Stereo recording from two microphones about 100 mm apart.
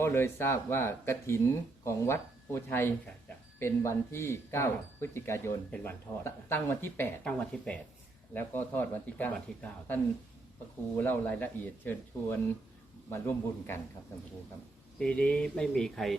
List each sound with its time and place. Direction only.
0.0 s speech: 25° left (ahead or behind)
7.3 s speech: 10° left (ahead or behind)
14.9 s speech: 10° left (ahead or behind)